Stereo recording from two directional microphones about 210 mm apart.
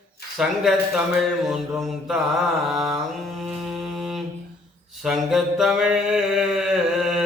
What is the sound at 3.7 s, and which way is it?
Music, centre (ahead or behind).